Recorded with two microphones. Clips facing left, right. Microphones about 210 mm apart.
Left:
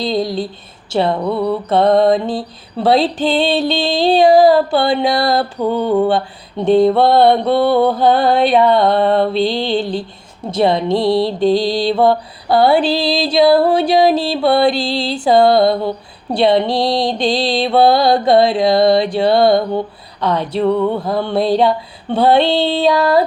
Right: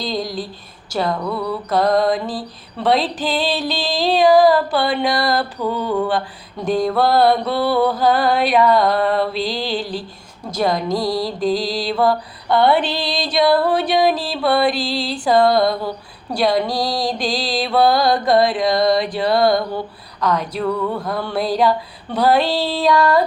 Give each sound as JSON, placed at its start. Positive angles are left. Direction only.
{"t": 0.0, "sound": "female singing", "side_deg": 30}